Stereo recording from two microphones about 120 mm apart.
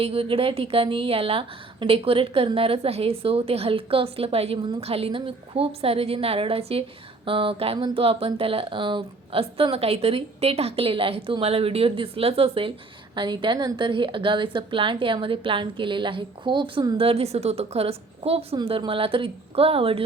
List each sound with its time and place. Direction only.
0.0 s a woman's voice: 50° right (ahead or behind)
13.1 s a woman's voice: 40° right (ahead or behind)
17.0 s a woman's voice: 55° right (ahead or behind)